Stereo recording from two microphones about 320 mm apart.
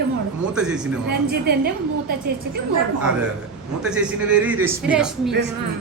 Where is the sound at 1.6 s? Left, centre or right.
Right.